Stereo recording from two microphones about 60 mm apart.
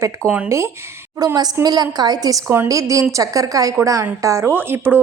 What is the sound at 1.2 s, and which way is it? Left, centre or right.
A woman's voice, right.